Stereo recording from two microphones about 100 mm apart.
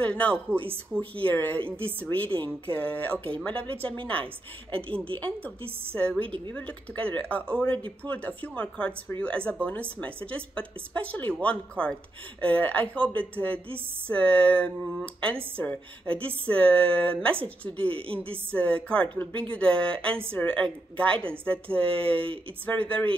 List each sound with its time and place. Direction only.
0.0 s a woman's voice: 15° left (ahead or behind)